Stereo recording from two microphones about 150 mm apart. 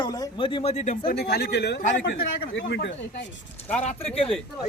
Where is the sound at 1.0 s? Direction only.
90° left; by 2.0 s 75° left (ahead or behind).